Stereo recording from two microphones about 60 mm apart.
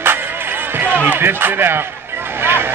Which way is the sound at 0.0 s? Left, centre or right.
Right.